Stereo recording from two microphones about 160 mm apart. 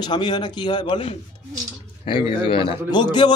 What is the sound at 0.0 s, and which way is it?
A man's voice, 30° left (ahead or behind).